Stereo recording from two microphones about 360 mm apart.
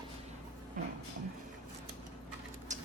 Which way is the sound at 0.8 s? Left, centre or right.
Right.